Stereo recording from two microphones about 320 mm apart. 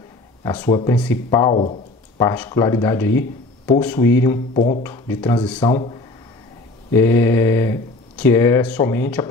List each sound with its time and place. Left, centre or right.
0.4 s speech: centre